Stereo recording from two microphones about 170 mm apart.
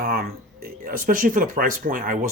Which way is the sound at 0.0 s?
60° right (ahead or behind).